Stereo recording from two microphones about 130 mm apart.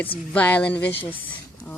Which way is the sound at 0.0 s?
15° left (ahead or behind).